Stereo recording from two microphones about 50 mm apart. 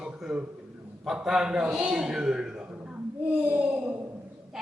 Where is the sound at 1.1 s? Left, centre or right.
Centre.